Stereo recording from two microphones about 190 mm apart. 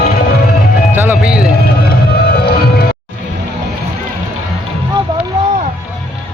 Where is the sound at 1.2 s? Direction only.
5° right (ahead or behind).